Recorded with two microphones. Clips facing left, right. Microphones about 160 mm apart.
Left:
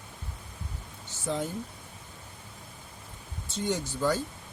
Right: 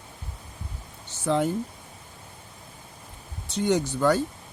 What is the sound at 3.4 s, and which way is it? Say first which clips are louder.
Speech: right 7 dB; 70° right (ahead or behind).